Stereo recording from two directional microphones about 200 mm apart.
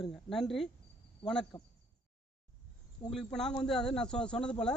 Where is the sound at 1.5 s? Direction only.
25° left (ahead or behind).